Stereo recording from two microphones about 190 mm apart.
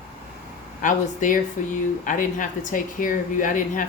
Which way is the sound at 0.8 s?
45° left (ahead or behind).